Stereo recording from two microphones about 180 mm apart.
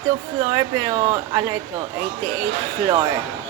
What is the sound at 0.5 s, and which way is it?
Speech, 20° right (ahead or behind).